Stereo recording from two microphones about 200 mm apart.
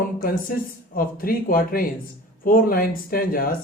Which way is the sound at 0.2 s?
45° left (ahead or behind).